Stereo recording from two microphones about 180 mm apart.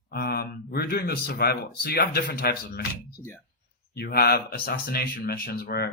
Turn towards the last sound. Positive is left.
turn(degrees=60)  # may be behind; listen again after turning